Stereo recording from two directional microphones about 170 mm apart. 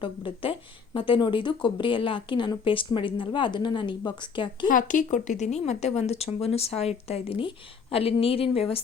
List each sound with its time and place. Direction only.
0.0 s a woman's voice: 30° left (ahead or behind)
4.7 s speech: 50° left (ahead or behind); by 8.4 s 35° left (ahead or behind)